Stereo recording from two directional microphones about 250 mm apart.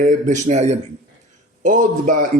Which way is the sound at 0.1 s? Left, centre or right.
Right.